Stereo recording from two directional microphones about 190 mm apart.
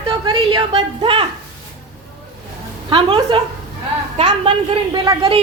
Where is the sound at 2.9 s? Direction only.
25° right (ahead or behind).